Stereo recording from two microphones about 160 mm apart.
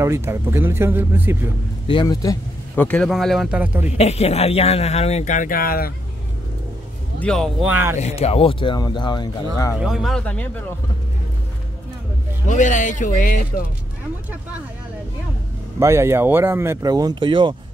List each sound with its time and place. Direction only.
0.0 s speech: 15° right (ahead or behind)
1.9 s speech: 25° left (ahead or behind)
2.7 s speech: 10° left (ahead or behind); by 3.8 s 10° right (ahead or behind)
4.0 s speech: 40° left (ahead or behind); by 5.9 s 70° left (ahead or behind)
7.2 s speech: 5° left (ahead or behind)
7.6 s speech: 15° right (ahead or behind)
8.0 s speech: 40° left (ahead or behind); by 9.8 s 25° left (ahead or behind)
9.8 s speech: 5° right (ahead or behind)
12.4 s speech: 50° left (ahead or behind)
15.8 s speech: 15° right (ahead or behind)